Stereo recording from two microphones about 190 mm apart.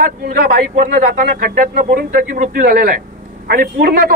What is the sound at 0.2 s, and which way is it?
A man's voice, 55° right (ahead or behind).